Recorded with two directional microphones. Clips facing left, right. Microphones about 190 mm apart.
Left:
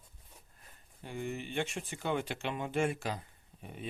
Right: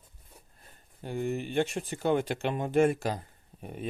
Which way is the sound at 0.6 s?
40° right (ahead or behind).